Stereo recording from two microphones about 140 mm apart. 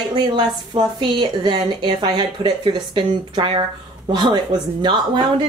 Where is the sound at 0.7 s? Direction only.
30° right (ahead or behind).